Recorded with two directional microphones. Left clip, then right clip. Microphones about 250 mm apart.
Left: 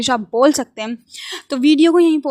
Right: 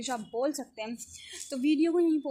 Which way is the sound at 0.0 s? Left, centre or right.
Left.